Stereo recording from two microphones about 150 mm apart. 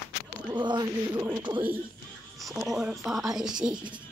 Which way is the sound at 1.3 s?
30° right (ahead or behind).